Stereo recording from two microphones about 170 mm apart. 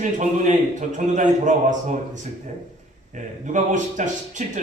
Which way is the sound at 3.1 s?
50° right (ahead or behind).